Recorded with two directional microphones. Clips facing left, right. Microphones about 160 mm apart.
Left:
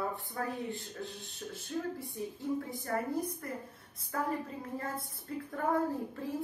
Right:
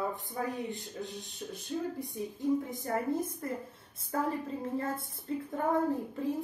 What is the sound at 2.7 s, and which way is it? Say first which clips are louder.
Speech: right 2 dB; 20° right (ahead or behind).